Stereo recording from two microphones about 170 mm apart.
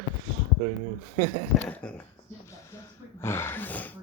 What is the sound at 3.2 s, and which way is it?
Speech, 15° left (ahead or behind).